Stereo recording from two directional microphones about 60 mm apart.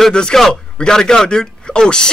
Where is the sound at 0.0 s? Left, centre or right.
Centre.